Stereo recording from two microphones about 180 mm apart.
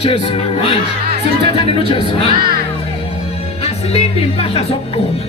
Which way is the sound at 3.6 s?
35° left (ahead or behind).